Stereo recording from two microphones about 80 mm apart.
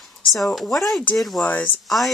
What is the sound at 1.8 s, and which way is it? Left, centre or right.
Speech, centre.